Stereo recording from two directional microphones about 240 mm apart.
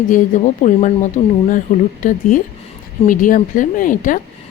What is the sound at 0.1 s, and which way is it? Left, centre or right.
Speech, left.